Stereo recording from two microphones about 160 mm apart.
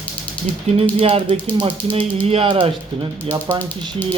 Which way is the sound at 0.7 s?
40° right (ahead or behind).